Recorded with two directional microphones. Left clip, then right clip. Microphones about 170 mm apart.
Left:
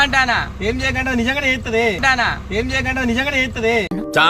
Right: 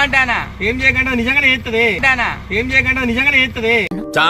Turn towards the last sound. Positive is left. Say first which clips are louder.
# even
turn(degrees=0)  # may be behind; listen again after turning